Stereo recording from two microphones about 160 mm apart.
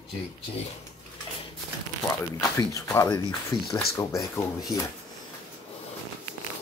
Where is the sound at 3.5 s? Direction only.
35° left (ahead or behind).